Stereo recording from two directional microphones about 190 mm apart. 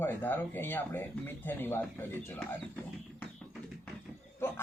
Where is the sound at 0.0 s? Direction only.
10° left (ahead or behind).